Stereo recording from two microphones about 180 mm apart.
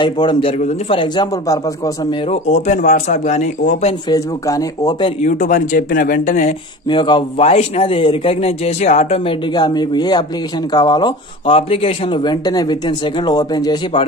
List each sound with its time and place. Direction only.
0.0 s a man's voice: 25° left (ahead or behind); by 3.4 s 40° left (ahead or behind)
4.1 s speech: 20° left (ahead or behind)
5.2 s speech: 45° left (ahead or behind)
6.9 s a man's voice: 25° left (ahead or behind)